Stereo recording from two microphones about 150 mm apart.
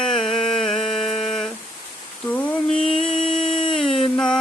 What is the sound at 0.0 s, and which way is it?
Music, 5° left (ahead or behind).